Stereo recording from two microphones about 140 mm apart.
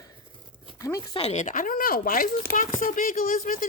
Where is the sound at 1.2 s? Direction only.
45° left (ahead or behind).